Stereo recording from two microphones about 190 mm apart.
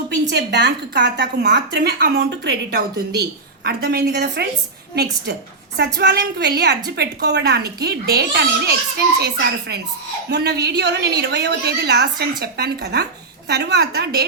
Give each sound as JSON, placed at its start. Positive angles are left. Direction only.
{"t": 0.3, "sound": "a woman's voice", "side_deg": -60}